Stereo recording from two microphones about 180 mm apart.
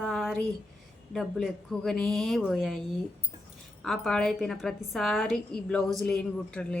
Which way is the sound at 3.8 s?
Centre (ahead or behind).